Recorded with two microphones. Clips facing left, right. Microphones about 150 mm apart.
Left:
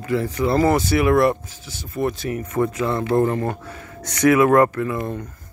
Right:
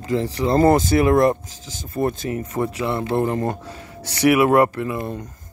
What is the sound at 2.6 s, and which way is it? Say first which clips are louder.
Speech: left 3 dB; 10° right (ahead or behind).